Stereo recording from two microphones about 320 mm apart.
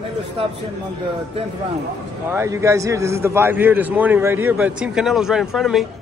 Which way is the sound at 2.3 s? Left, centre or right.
Centre.